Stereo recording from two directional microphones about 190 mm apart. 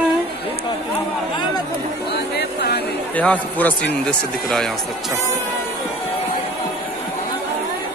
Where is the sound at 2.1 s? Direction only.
60° left (ahead or behind).